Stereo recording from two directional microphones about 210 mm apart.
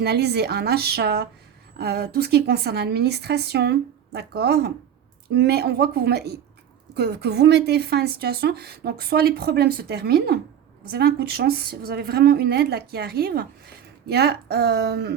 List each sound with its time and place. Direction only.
0.0 s a woman's voice: 50° right (ahead or behind)